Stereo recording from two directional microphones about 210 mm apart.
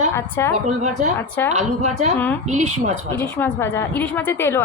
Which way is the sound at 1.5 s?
30° right (ahead or behind).